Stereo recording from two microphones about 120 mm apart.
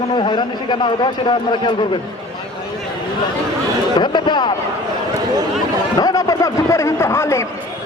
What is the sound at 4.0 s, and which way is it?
Speech, 40° left (ahead or behind).